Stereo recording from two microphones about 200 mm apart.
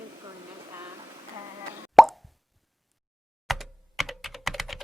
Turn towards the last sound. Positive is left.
turn(degrees=0)  # may be behind; listen again after turning